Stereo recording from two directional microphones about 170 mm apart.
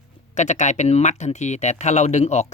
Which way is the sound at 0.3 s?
45° left (ahead or behind).